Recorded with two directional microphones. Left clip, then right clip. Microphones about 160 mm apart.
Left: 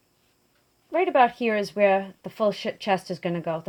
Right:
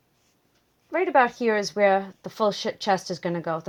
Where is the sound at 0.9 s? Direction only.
20° right (ahead or behind).